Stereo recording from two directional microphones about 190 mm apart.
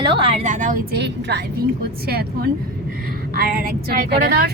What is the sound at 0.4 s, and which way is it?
Speech, 40° right (ahead or behind).